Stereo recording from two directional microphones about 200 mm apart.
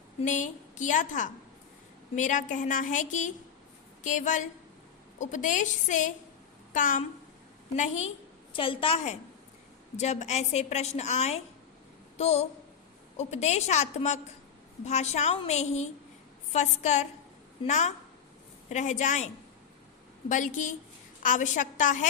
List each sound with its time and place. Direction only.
0.2 s a woman's voice: 40° left (ahead or behind)